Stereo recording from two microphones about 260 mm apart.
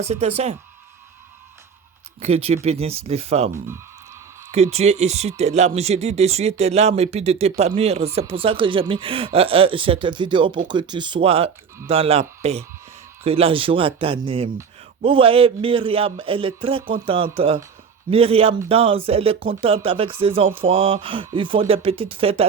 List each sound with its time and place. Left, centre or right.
0.0 s speech: right
2.2 s speech: right
4.5 s speech: right